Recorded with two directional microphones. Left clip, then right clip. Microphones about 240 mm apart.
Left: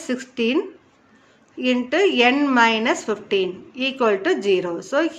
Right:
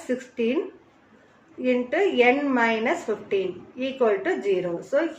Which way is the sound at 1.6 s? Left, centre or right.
Left.